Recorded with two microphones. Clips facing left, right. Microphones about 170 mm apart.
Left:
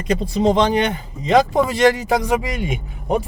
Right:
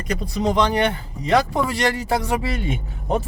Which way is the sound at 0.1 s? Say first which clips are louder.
Left 5 dB; 25° left (ahead or behind).